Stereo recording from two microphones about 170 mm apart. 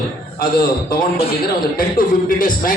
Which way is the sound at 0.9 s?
60° left (ahead or behind).